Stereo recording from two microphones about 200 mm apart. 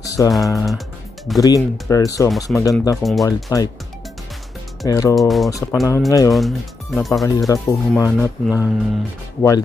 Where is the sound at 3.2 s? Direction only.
15° left (ahead or behind).